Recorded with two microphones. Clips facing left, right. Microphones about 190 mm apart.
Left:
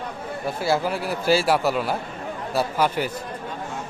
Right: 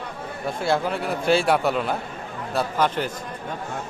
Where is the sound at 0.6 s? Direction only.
5° left (ahead or behind).